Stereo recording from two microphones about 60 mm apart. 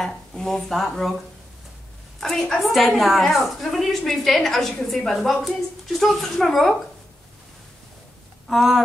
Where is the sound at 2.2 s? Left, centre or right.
Centre.